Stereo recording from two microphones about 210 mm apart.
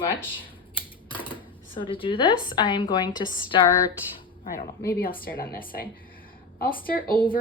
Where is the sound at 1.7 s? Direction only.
25° left (ahead or behind).